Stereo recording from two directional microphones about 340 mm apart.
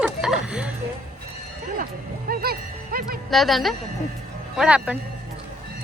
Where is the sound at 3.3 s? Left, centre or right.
Centre.